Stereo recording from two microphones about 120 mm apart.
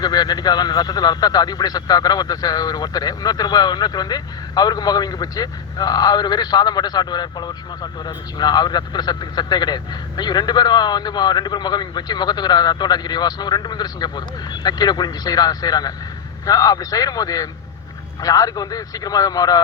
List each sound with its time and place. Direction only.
0.0 s speech: 35° left (ahead or behind)